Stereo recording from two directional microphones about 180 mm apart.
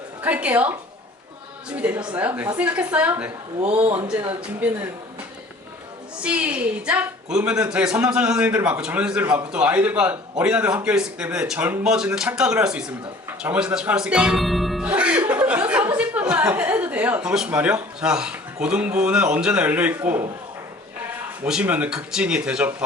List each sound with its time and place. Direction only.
0.2 s speech: 10° right (ahead or behind)
3.8 s speech: 30° right (ahead or behind)
4.4 s speech: 10° right (ahead or behind)
6.2 s a man's voice: 5° right (ahead or behind)
21.4 s a man's voice: 5° right (ahead or behind)